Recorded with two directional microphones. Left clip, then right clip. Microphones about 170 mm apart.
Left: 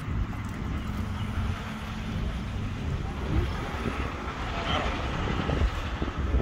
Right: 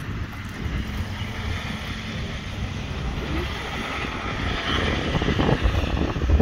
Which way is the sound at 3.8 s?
45° right (ahead or behind).